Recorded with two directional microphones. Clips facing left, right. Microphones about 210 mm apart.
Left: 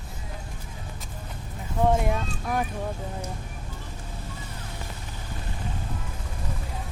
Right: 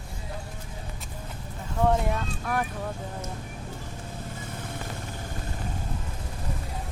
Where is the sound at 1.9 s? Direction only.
15° left (ahead or behind).